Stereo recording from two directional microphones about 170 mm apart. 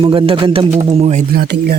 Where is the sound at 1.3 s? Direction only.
65° right (ahead or behind).